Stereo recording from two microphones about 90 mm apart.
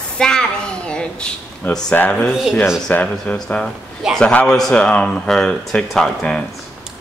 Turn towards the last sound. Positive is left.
turn(degrees=5)  # may be behind; listen again after turning